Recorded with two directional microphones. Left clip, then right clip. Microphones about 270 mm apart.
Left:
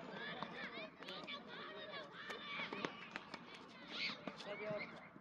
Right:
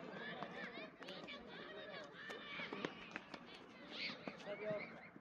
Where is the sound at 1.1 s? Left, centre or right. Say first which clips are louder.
Left 5 dB; left.